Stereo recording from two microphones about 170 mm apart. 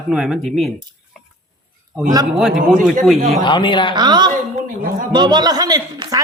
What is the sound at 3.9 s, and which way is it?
Speech, 25° right (ahead or behind).